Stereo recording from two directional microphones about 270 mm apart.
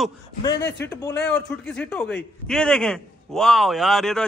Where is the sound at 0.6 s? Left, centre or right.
Left.